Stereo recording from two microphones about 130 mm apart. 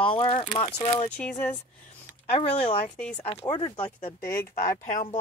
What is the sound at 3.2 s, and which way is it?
Speech, 50° left (ahead or behind).